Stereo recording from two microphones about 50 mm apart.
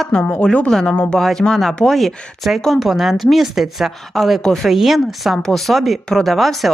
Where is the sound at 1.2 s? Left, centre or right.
Centre.